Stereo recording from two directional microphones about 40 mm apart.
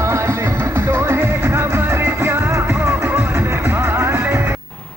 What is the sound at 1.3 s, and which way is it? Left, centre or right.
Music, right.